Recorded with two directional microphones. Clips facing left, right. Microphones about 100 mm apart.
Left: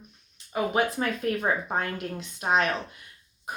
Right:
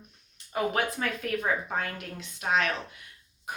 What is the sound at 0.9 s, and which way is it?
A woman's voice, 30° left (ahead or behind).